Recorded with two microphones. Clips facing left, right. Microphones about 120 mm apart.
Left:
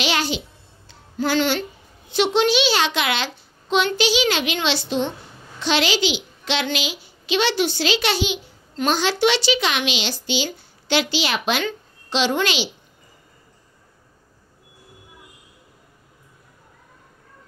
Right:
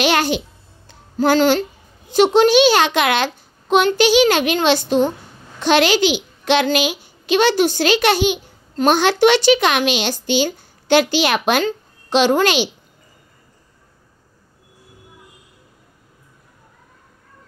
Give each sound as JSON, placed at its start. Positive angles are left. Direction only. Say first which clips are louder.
{"t": 0.0, "sound": "music", "louder": "right 6 dB", "side_deg": -50}
{"t": 0.8, "sound": "a child's voice", "louder": "right 7 dB", "side_deg": -45}